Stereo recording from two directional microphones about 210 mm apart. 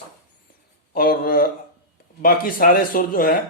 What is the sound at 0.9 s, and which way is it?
Speech, 45° left (ahead or behind).